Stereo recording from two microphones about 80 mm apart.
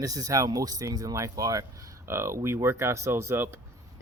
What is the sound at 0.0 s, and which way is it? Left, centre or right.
Speech, right.